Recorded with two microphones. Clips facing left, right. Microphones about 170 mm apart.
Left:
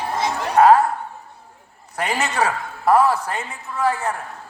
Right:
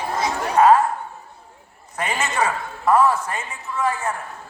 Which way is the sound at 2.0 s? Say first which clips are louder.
Left 1 dB; 65° left (ahead or behind).